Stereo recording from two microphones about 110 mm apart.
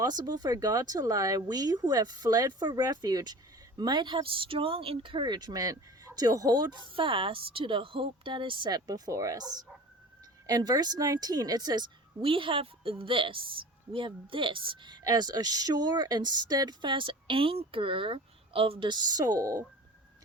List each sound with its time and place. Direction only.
0.0 s a woman's voice: 35° right (ahead or behind)